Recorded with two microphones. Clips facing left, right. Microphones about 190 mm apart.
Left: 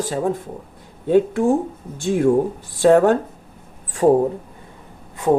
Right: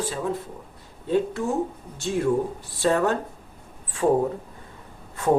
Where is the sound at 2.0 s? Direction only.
50° left (ahead or behind).